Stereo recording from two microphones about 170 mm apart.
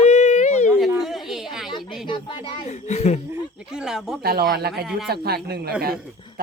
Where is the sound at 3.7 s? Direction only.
5° right (ahead or behind).